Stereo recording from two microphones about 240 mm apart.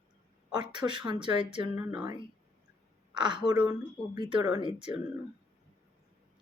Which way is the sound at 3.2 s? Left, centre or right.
Centre.